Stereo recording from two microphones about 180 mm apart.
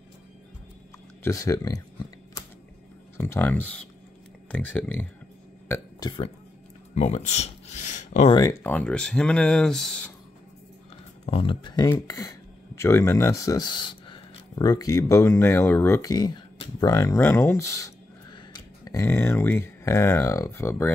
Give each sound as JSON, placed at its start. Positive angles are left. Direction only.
{"t": 1.2, "sound": "a sound", "side_deg": 20}
{"t": 3.2, "sound": "speech", "side_deg": 10}
{"t": 5.7, "sound": "speech", "side_deg": 20}
{"t": 7.0, "sound": "a sound", "side_deg": 40}
{"t": 8.3, "sound": "speech", "side_deg": 20}
{"t": 8.7, "sound": "speech", "side_deg": 5}
{"t": 11.2, "sound": "speech", "side_deg": 30}